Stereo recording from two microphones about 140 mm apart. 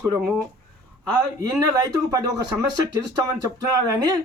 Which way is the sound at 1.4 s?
25° right (ahead or behind).